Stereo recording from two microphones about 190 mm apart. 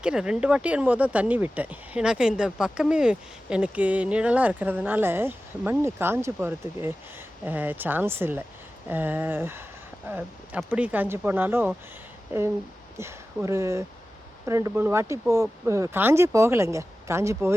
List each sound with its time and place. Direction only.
0.0 s speech: 5° right (ahead or behind)
13.0 s speech: 15° right (ahead or behind)